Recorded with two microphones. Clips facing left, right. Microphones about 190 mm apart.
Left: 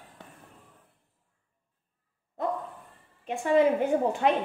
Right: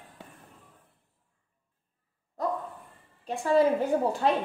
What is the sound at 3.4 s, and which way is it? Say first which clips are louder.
Speech: left 1 dB; 20° left (ahead or behind).